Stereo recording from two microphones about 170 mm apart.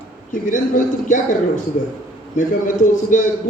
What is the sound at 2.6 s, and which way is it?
Speech, 50° left (ahead or behind).